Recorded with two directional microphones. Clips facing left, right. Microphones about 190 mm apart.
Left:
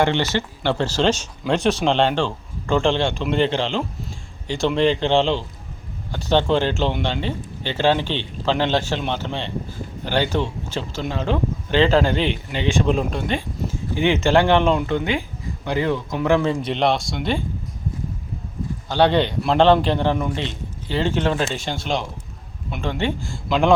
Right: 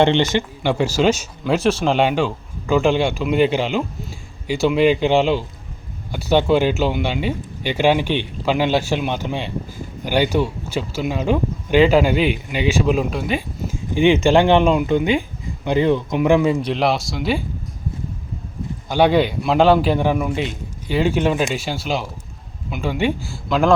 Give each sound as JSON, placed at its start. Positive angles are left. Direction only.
{"t": 0.0, "sound": "speech", "side_deg": -20}
{"t": 13.9, "sound": "speech", "side_deg": -15}
{"t": 16.6, "sound": "speech", "side_deg": 0}
{"t": 18.9, "sound": "speech", "side_deg": -10}